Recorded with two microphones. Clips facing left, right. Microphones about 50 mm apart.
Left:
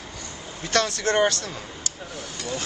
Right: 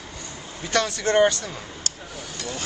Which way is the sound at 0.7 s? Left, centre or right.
Centre.